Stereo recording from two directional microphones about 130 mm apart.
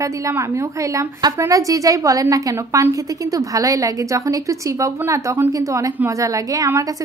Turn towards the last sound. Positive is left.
turn(degrees=-25)  # may be behind; listen again after turning